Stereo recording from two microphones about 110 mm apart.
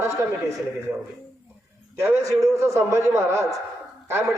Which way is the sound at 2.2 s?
30° right (ahead or behind).